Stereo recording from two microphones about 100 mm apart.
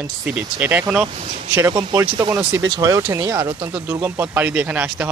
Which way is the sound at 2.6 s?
35° right (ahead or behind).